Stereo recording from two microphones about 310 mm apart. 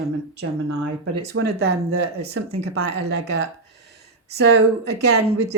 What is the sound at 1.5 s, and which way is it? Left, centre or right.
Speech, right.